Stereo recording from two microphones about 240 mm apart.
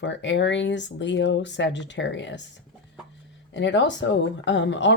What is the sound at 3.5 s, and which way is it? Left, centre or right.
Speech, left.